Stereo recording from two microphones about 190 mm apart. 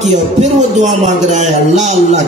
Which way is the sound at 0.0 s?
35° right (ahead or behind).